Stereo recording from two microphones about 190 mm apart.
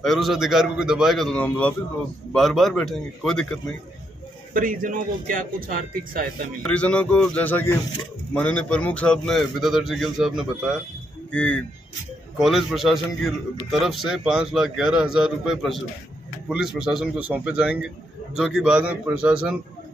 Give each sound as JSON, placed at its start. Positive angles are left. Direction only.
{"t": 0.0, "sound": "a man's voice", "side_deg": 0}
{"t": 4.6, "sound": "a man's voice", "side_deg": -45}
{"t": 6.6, "sound": "a man's voice", "side_deg": 5}